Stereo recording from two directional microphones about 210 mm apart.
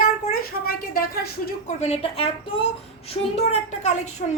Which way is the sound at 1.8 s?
30° left (ahead or behind).